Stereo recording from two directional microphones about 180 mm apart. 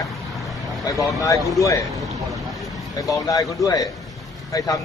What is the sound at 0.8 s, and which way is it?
Speech, 20° left (ahead or behind).